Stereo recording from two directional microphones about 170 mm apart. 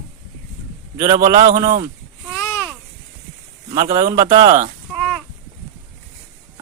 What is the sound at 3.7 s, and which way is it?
Speech, 25° right (ahead or behind).